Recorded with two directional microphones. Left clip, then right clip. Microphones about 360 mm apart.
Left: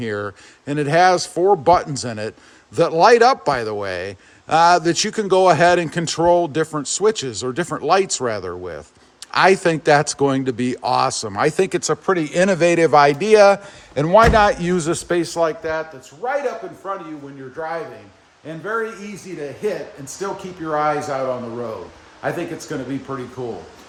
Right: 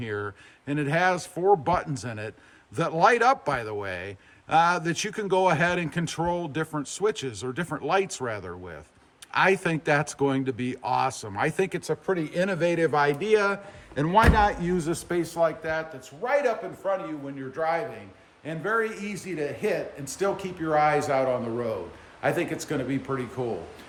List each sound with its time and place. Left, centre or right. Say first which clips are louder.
0.0 s speech: left 7 dB; centre
16.8 s speech: even; centre
18.4 s speech: left 3 dB; centre
20.2 s speech: left 1 dB; centre
22.2 s speech: left 2 dB; centre